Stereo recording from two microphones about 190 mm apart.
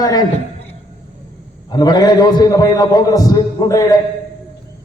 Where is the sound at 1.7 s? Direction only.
20° left (ahead or behind).